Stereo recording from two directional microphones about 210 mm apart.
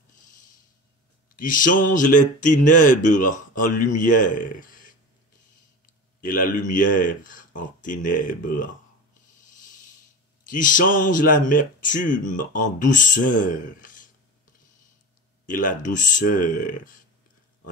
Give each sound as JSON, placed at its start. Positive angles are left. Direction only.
{"t": 1.3, "sound": "speech", "side_deg": 40}
{"t": 6.2, "sound": "speech", "side_deg": 40}
{"t": 10.5, "sound": "speech", "side_deg": 40}
{"t": 15.4, "sound": "speech", "side_deg": 40}